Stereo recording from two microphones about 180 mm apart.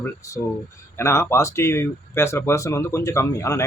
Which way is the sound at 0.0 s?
15° left (ahead or behind).